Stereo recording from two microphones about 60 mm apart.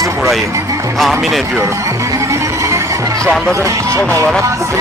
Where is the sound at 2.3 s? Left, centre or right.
Right.